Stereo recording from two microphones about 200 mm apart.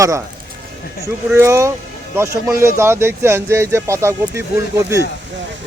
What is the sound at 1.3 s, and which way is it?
Speech, 15° right (ahead or behind).